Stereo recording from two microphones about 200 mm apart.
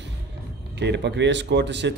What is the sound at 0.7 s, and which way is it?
Speech, 60° right (ahead or behind).